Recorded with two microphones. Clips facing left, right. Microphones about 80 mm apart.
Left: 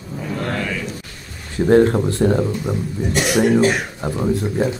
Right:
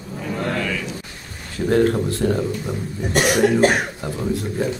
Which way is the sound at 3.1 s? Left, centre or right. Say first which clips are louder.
Right 1 dB; right.